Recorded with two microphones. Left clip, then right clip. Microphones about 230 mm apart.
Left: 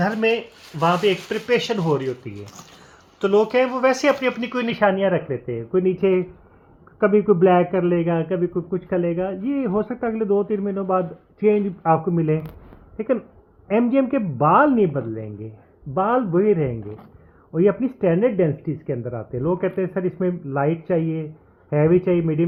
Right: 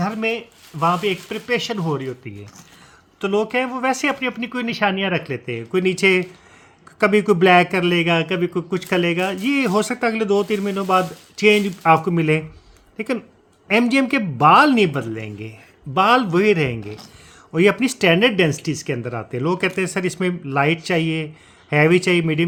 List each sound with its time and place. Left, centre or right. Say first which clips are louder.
0.8 s speech: left 1 dB; right
3.2 s a man's voice: left 3 dB; right
13.7 s a man's voice: right 2 dB; right